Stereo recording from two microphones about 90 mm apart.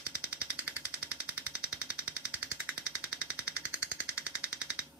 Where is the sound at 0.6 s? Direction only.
15° right (ahead or behind).